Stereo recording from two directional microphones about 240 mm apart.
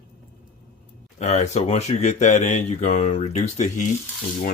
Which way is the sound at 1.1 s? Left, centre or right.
Left.